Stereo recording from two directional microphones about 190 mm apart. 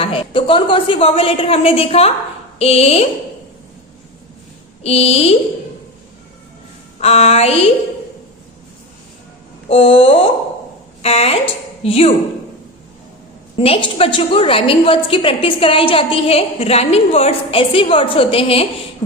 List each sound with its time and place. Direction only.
0.0 s a woman's voice: 30° left (ahead or behind)
4.8 s speech: 35° left (ahead or behind)
7.0 s speech: 35° left (ahead or behind)
9.6 s a woman's voice: 30° left (ahead or behind)
13.6 s a woman's voice: 30° left (ahead or behind)